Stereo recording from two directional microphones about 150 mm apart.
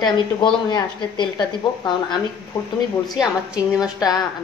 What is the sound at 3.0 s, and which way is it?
Speech, 5° right (ahead or behind).